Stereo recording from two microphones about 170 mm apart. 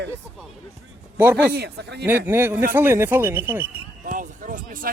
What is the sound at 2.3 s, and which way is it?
Speech, 15° right (ahead or behind).